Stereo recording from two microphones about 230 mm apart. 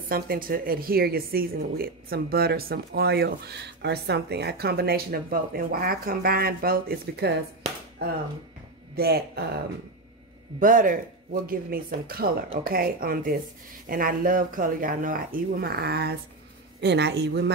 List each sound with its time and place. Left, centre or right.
0.1 s a woman's voice: right
10.6 s a woman's voice: right